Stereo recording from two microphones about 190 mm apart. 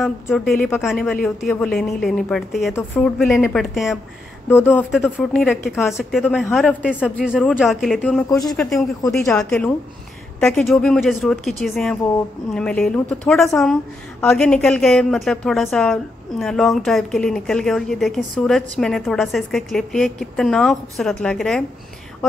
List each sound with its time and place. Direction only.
0.0 s a woman's voice: centre (ahead or behind)
4.5 s a woman's voice: 10° left (ahead or behind)
8.3 s speech: 20° left (ahead or behind)
8.5 s a woman's voice: centre (ahead or behind)